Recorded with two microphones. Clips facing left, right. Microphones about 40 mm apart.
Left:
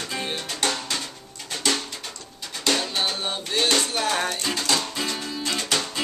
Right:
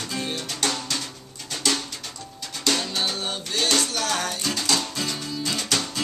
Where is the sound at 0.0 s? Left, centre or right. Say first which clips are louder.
Even; centre.